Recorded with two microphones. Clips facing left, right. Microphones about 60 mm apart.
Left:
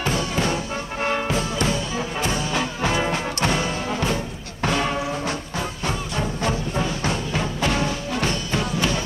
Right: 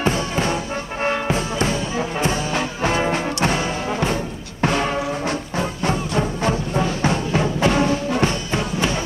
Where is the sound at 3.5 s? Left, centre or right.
Centre.